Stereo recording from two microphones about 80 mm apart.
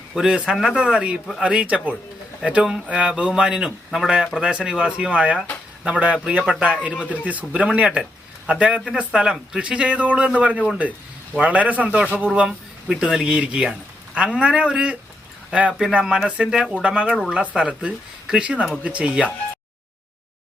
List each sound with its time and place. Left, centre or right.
0.1 s speech: centre